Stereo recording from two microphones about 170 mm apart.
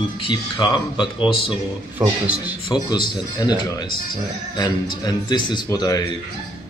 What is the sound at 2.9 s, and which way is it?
A man's voice, 25° left (ahead or behind).